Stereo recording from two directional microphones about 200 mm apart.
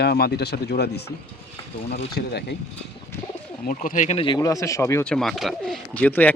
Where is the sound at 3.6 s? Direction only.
45° left (ahead or behind); by 6.3 s 10° left (ahead or behind).